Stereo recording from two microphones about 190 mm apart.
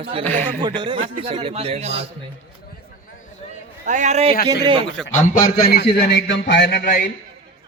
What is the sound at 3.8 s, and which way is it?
Speech, 40° right (ahead or behind).